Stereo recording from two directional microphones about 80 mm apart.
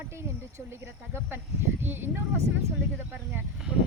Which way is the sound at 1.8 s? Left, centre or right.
Right.